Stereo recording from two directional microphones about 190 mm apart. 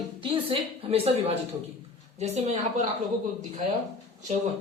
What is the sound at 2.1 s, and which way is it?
Speech, 35° right (ahead or behind).